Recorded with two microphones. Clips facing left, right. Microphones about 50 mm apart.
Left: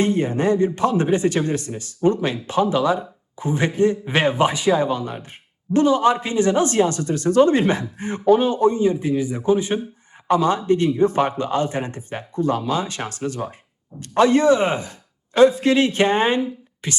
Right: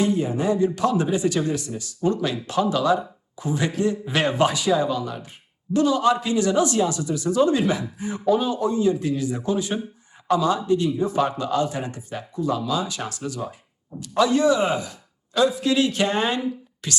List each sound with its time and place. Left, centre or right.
0.0 s a man's voice: left
0.8 s speech: left
4.2 s speech: centre
4.5 s speech: left
10.2 s speech: left